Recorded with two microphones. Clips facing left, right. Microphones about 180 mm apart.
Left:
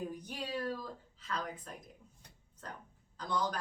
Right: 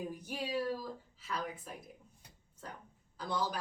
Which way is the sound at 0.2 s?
5° right (ahead or behind).